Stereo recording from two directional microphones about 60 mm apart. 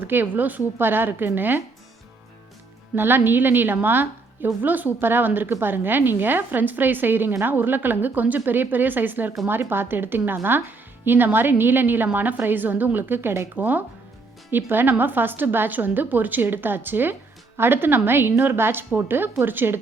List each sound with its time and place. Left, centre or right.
0.1 s a woman's voice: right
2.9 s a woman's voice: right
13.6 s a woman's voice: right